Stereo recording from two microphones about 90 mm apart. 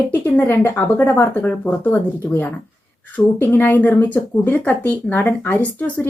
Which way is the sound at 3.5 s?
20° left (ahead or behind).